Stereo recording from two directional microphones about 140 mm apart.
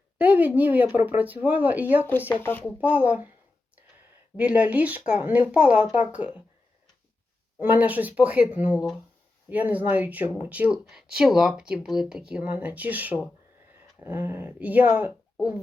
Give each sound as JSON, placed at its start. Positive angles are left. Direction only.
{"t": 0.2, "sound": "speech", "side_deg": -10}
{"t": 2.3, "sound": "speech", "side_deg": 15}
{"t": 2.8, "sound": "speech", "side_deg": -10}
{"t": 4.4, "sound": "speech", "side_deg": -10}
{"t": 7.6, "sound": "speech", "side_deg": -10}